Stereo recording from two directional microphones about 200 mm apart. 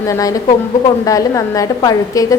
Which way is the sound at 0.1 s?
15° left (ahead or behind).